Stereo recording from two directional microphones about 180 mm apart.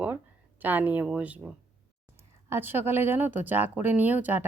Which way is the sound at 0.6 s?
10° right (ahead or behind).